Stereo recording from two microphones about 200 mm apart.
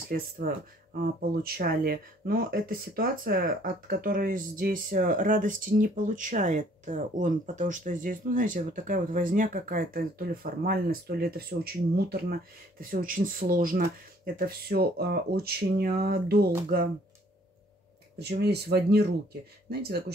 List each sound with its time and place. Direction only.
0.4 s speech: 45° right (ahead or behind)
18.4 s speech: 55° right (ahead or behind)